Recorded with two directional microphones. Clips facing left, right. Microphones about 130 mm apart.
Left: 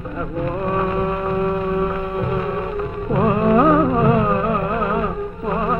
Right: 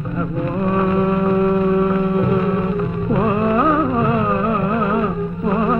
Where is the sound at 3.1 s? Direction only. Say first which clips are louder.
Left 2 dB; 45° left (ahead or behind).